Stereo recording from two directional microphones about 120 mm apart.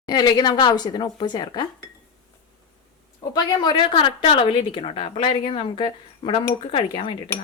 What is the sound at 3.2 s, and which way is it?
A woman's voice, 35° left (ahead or behind).